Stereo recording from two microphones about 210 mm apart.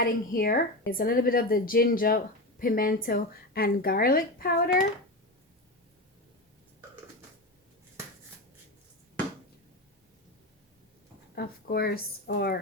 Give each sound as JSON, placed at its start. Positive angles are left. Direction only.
{"t": 0.0, "sound": "a woman's voice", "side_deg": 45}
{"t": 11.3, "sound": "a woman's voice", "side_deg": 50}